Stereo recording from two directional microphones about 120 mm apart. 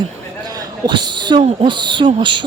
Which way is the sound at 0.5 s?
40° right (ahead or behind).